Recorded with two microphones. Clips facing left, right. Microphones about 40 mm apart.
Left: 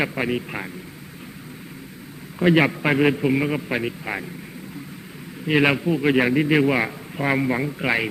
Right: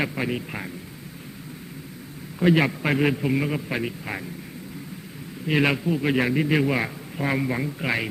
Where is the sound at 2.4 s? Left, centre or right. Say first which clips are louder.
Left 3 dB; centre.